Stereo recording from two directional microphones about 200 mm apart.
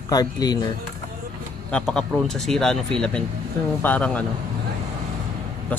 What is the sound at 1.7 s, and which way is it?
Speech, 5° left (ahead or behind).